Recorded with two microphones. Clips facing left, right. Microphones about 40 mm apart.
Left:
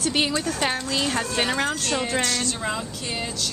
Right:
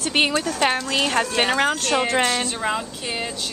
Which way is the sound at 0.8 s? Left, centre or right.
Right.